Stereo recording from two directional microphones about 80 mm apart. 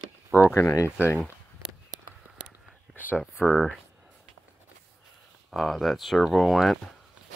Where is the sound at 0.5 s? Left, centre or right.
Left.